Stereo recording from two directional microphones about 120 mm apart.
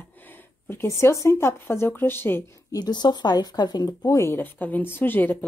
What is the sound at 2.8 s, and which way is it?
A woman's voice, 35° left (ahead or behind).